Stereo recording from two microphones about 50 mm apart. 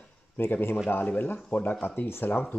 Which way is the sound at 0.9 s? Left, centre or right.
Left.